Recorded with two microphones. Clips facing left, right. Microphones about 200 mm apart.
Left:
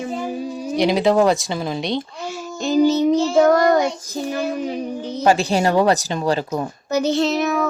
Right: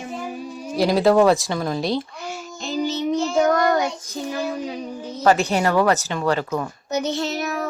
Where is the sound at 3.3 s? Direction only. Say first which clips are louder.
Left 3 dB; 40° left (ahead or behind).